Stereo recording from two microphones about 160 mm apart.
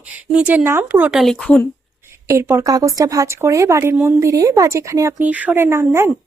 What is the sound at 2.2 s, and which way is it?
A woman's voice, 15° right (ahead or behind).